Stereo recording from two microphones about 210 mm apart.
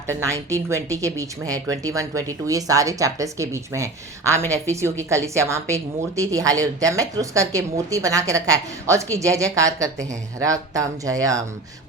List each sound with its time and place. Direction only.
0.1 s a woman's voice: 15° right (ahead or behind)